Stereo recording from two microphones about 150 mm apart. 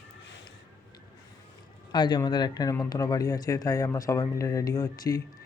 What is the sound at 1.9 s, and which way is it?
Speech, 30° left (ahead or behind).